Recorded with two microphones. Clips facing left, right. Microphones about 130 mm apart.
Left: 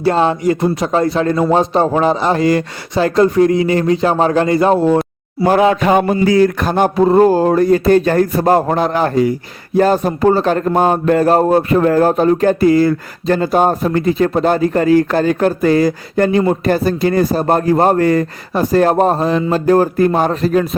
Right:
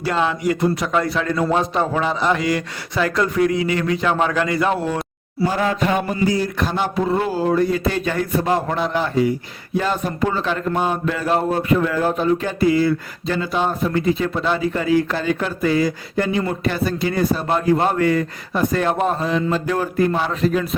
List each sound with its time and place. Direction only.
0.0 s a man's voice: 35° left (ahead or behind)
5.4 s speech: 70° left (ahead or behind)
6.6 s a man's voice: 50° left (ahead or behind)